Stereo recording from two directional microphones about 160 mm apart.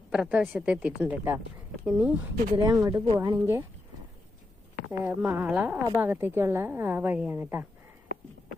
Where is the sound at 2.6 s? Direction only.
15° right (ahead or behind).